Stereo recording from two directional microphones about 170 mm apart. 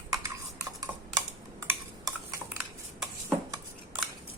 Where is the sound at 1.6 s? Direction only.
15° right (ahead or behind).